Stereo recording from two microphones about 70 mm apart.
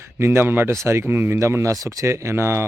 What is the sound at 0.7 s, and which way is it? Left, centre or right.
Speech, right.